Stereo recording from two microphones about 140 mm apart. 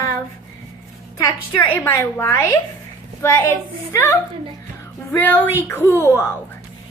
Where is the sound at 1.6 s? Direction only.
15° left (ahead or behind).